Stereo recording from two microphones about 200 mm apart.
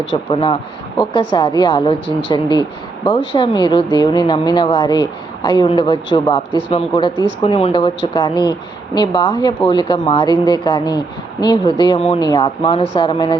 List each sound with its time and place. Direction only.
0.0 s a woman's voice: 25° left (ahead or behind)